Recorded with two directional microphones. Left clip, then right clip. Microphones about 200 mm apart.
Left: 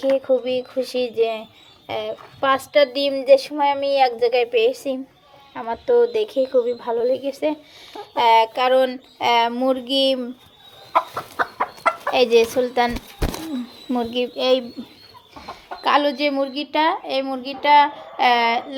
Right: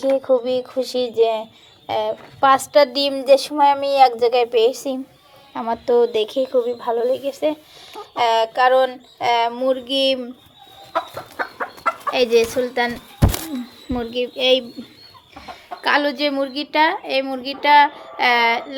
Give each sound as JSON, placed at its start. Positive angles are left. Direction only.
{"t": 0.2, "sound": "speech", "side_deg": -5}
{"t": 11.5, "sound": "chicken", "side_deg": 35}
{"t": 12.1, "sound": "speech", "side_deg": 10}
{"t": 13.9, "sound": "speech", "side_deg": 10}
{"t": 15.4, "sound": "speech", "side_deg": -5}